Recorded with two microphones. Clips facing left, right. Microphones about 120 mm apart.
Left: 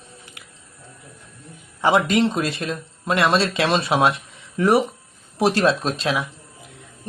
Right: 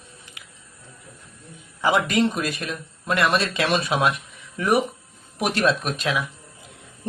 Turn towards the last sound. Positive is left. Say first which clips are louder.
# left 2 dB
turn(degrees=30)  # may be behind; listen again after turning